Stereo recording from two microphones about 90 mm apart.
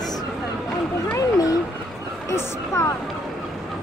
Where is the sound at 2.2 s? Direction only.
35° left (ahead or behind).